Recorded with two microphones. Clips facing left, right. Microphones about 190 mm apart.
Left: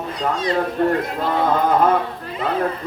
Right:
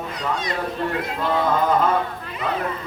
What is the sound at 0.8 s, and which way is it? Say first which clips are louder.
Speech: left 9 dB; 50° left (ahead or behind).